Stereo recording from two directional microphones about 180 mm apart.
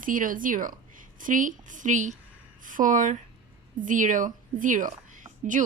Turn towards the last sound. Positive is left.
turn(degrees=-45)  # may be behind; listen again after turning